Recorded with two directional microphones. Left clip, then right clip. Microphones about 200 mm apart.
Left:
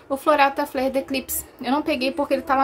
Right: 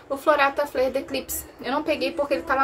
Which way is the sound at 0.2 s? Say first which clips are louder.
Left 2 dB; 45° left (ahead or behind).